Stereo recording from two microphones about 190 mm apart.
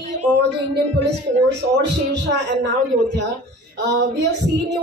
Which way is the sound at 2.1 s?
65° right (ahead or behind).